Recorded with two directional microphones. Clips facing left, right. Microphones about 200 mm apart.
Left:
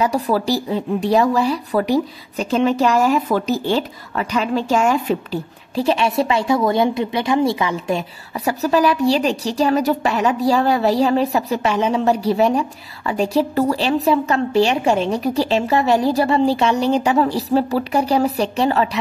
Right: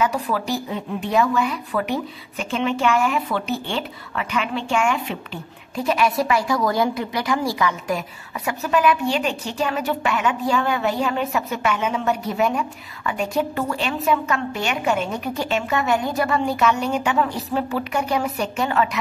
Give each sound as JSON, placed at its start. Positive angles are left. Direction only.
{"t": 0.0, "sound": "a woman's voice", "side_deg": 35}
{"t": 8.5, "sound": "a woman's voice", "side_deg": 35}